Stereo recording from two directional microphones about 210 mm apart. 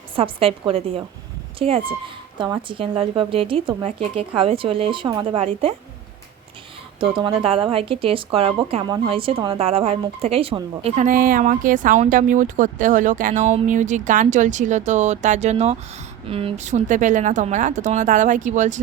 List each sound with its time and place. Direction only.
0.2 s speech: 25° right (ahead or behind)
7.0 s a woman's voice: 25° right (ahead or behind)